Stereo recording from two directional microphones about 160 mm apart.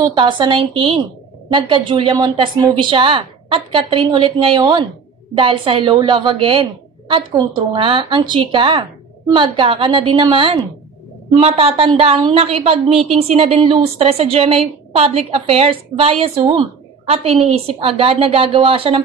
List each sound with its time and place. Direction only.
0.0 s a woman's voice: 30° right (ahead or behind)